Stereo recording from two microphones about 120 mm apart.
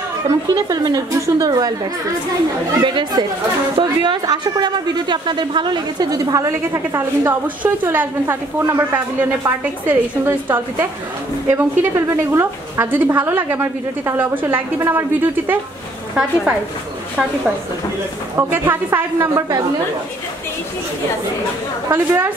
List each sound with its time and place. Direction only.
0.3 s a woman's voice: 35° right (ahead or behind)
2.8 s a woman's voice: 40° right (ahead or behind); by 15.6 s 15° right (ahead or behind)
18.3 s a woman's voice: 20° right (ahead or behind)
21.8 s a woman's voice: 20° right (ahead or behind)